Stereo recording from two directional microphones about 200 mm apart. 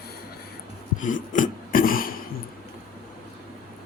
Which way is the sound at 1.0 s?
40° left (ahead or behind).